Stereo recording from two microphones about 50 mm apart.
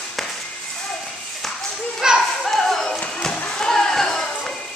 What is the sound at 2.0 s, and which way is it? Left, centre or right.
Children playing, centre.